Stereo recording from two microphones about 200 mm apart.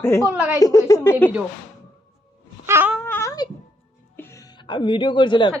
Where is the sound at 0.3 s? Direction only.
10° right (ahead or behind).